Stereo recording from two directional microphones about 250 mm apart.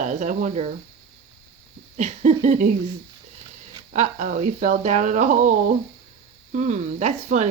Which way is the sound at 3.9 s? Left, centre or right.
Right.